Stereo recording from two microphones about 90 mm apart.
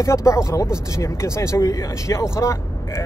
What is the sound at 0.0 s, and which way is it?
Speech, 35° left (ahead or behind).